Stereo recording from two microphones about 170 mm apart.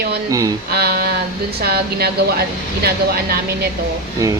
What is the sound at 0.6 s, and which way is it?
A woman's voice, 65° right (ahead or behind).